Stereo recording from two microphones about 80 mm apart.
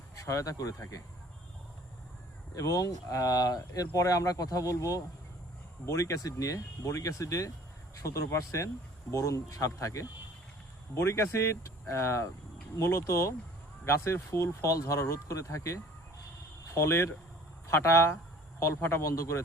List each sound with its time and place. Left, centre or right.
0.2 s speech: left
2.6 s speech: left